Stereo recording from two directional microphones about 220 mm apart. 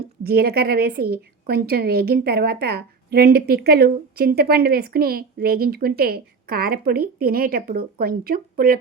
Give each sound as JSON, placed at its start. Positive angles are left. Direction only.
{"t": 0.2, "sound": "a woman's voice", "side_deg": -45}